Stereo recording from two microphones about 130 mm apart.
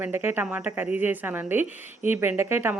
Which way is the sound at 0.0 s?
15° right (ahead or behind).